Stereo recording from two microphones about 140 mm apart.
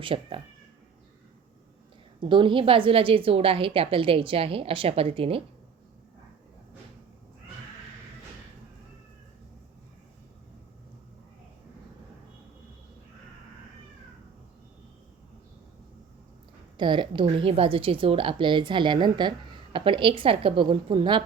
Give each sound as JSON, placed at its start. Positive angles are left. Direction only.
{"t": 0.0, "sound": "a woman's voice", "side_deg": -40}
{"t": 2.3, "sound": "a woman's voice", "side_deg": -35}
{"t": 16.7, "sound": "a woman's voice", "side_deg": -35}